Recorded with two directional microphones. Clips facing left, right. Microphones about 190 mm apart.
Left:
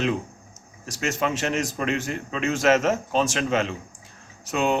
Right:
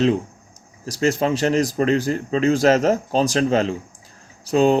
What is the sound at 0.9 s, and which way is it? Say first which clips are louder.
Speech: right 7 dB; 35° right (ahead or behind).